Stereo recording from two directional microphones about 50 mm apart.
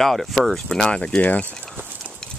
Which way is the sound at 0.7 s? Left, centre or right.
Centre.